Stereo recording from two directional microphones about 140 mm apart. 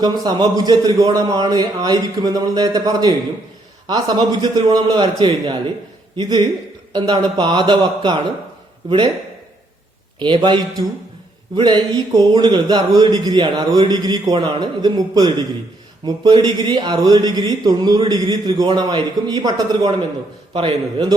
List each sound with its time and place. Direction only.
0.0 s a man's voice: 30° right (ahead or behind)
10.2 s a man's voice: 35° right (ahead or behind)